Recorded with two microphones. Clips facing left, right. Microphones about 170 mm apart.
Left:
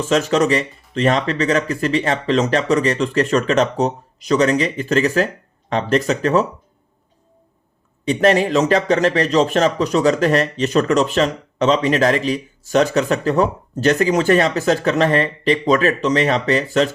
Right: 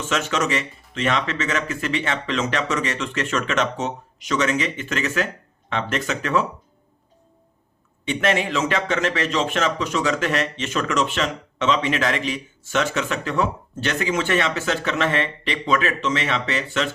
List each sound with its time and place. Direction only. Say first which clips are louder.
0.0 s a man's voice: left 7 dB; 35° left (ahead or behind)
8.0 s a man's voice: left 7 dB; 35° left (ahead or behind)